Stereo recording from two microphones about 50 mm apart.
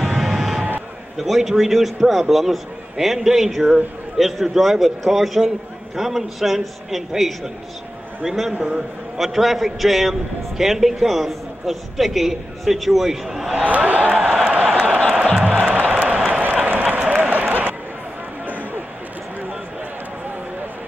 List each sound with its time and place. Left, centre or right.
0.0 s vehicle: centre
1.1 s a man's voice: centre
8.5 s a man's voice: right
9.1 s a man's voice: centre
13.6 s speech: right
14.2 s a sound: centre
15.4 s music: right
16.3 s run: right